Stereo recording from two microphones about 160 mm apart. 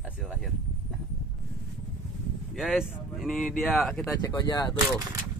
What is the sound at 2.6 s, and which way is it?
Speech, centre (ahead or behind).